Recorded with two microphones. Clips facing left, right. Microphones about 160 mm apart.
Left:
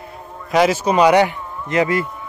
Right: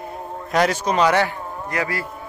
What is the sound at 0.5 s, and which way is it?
A man's voice, 5° left (ahead or behind).